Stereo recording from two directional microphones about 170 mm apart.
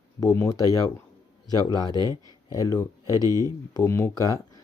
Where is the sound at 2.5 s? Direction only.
20° left (ahead or behind).